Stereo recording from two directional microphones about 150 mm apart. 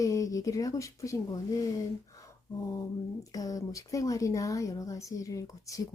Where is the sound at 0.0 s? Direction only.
20° left (ahead or behind).